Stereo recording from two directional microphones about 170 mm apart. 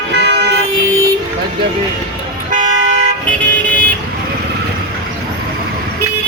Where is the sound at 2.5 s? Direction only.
50° right (ahead or behind).